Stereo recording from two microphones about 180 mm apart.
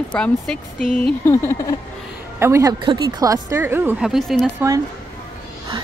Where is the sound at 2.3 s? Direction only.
15° right (ahead or behind).